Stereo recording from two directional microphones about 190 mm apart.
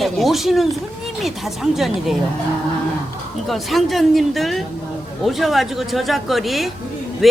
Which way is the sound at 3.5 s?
Centre (ahead or behind).